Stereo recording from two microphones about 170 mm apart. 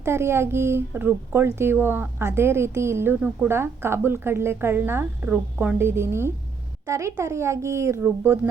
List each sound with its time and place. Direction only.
0.0 s speech: 15° right (ahead or behind)